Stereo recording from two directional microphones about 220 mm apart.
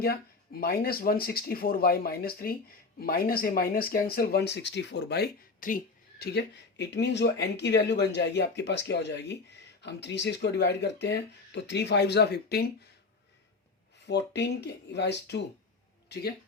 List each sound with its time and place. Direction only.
0.6 s speech: 45° left (ahead or behind)
14.1 s speech: 50° left (ahead or behind)